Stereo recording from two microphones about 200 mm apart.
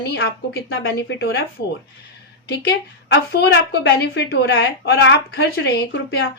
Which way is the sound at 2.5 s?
60° left (ahead or behind).